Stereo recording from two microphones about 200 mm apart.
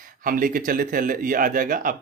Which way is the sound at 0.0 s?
45° right (ahead or behind).